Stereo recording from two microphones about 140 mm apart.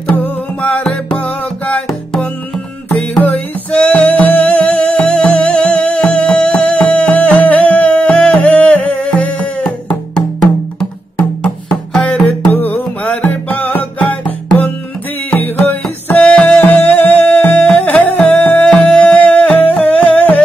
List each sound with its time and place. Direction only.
0.1 s music: 10° left (ahead or behind)